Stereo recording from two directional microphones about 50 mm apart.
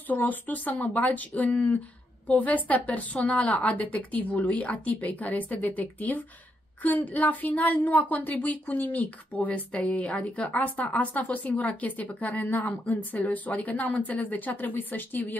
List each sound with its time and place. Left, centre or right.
0.1 s a woman's voice: left